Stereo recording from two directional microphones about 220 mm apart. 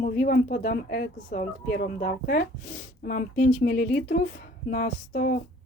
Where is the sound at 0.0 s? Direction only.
40° left (ahead or behind).